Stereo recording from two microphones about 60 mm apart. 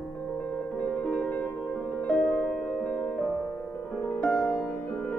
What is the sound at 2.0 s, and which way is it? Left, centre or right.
Music, left.